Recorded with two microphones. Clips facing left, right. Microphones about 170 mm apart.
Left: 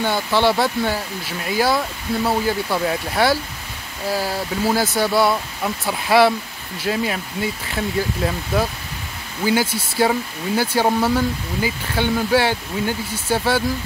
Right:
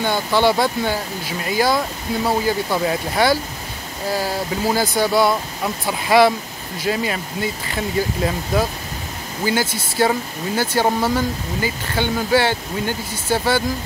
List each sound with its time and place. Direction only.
0.3 s speech: 5° right (ahead or behind)